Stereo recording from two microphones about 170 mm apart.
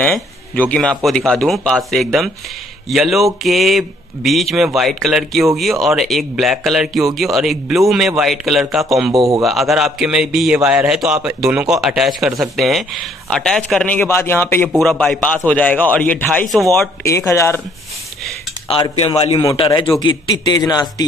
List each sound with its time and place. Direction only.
0.0 s a man's voice: 10° left (ahead or behind)
14.7 s a man's voice: centre (ahead or behind)
17.0 s a man's voice: 15° left (ahead or behind)
18.7 s a man's voice: 35° left (ahead or behind)